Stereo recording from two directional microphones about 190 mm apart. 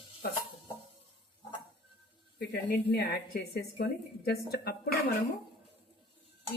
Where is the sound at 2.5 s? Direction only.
60° left (ahead or behind).